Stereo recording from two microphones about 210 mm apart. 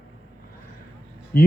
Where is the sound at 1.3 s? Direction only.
45° left (ahead or behind).